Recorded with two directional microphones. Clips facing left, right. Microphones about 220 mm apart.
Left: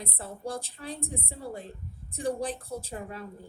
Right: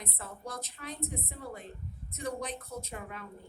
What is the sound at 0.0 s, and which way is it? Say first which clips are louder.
A woman's voice: left 6 dB; 30° left (ahead or behind).